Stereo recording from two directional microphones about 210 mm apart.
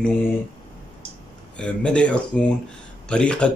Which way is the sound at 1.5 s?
5° left (ahead or behind).